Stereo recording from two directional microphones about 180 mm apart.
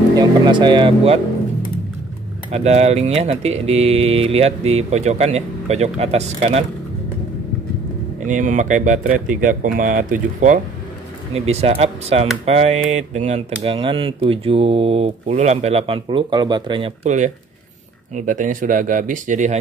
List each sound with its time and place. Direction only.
0.1 s speech: 25° right (ahead or behind)
2.5 s speech: 35° right (ahead or behind)
8.3 s speech: 45° right (ahead or behind)
11.3 s speech: 35° right (ahead or behind)